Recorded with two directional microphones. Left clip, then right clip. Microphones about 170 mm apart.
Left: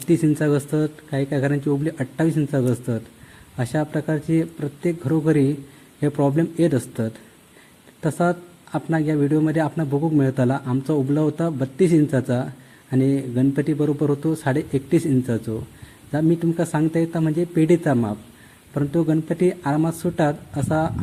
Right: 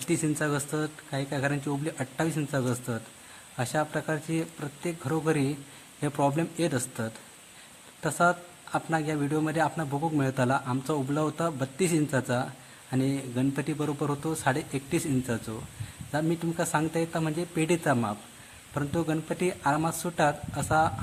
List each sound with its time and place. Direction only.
0.1 s a man's voice: 15° left (ahead or behind)